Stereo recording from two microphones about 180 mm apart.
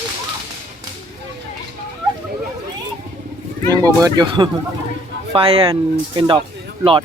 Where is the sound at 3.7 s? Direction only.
20° right (ahead or behind).